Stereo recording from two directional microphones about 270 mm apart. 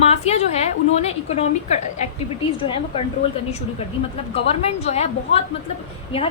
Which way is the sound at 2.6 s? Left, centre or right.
Centre.